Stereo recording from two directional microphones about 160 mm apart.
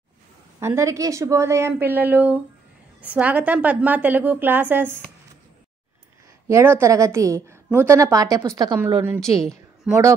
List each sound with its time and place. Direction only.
0.6 s a woman's voice: 15° right (ahead or behind)
6.4 s a woman's voice: 15° right (ahead or behind)